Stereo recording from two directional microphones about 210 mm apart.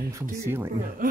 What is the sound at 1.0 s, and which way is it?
Speech, 40° right (ahead or behind).